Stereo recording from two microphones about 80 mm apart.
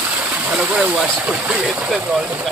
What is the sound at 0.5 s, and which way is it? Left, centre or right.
Speech, centre.